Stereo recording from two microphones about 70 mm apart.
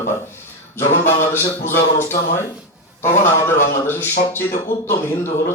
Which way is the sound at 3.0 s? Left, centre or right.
Left.